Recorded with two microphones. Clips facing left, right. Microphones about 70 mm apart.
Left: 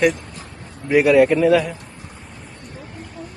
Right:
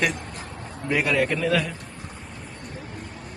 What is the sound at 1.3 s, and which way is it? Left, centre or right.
Speech, centre.